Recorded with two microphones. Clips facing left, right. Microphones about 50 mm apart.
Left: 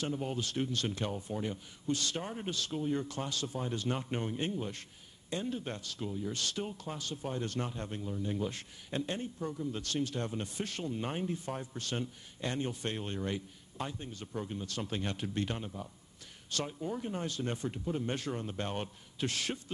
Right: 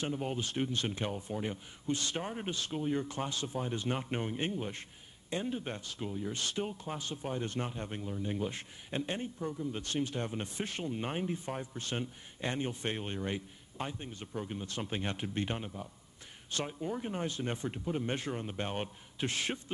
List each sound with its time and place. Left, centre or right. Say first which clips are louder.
0.1 s speech: even; right
9.4 s speech: even; centre
9.7 s speech: even; right